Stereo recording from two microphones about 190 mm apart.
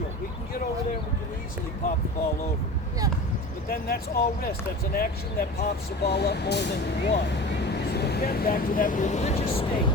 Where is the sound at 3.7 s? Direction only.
55° left (ahead or behind).